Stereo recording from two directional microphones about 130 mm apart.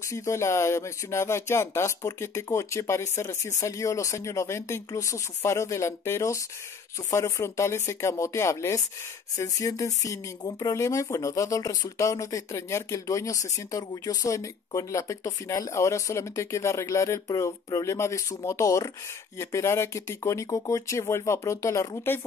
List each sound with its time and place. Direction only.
0.1 s speech: 25° left (ahead or behind)